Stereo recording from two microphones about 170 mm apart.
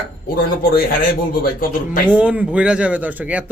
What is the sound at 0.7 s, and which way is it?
Speech, 60° left (ahead or behind).